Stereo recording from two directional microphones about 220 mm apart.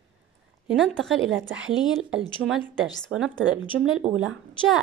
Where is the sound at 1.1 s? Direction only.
60° right (ahead or behind).